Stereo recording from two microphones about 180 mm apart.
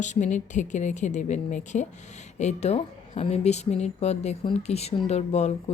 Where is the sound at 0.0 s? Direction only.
40° left (ahead or behind).